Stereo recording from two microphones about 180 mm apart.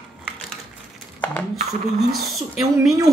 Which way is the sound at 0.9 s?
5° left (ahead or behind).